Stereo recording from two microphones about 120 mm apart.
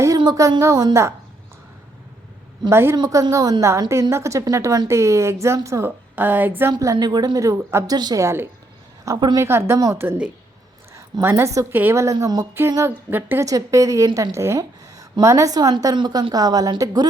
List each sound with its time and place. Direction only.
0.6 s a woman's voice: 25° right (ahead or behind)
2.6 s a woman's voice: 20° right (ahead or behind)
7.9 s a woman's voice: 35° right (ahead or behind)
8.2 s a woman's voice: 20° right (ahead or behind)
9.0 s a woman's voice: 35° right (ahead or behind)
9.4 s a woman's voice: 20° right (ahead or behind)
13.4 s a woman's voice: 25° right (ahead or behind)